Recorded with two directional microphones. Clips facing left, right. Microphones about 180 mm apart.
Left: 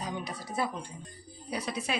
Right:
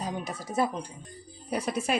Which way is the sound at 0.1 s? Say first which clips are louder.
Right 3 dB; 45° right (ahead or behind).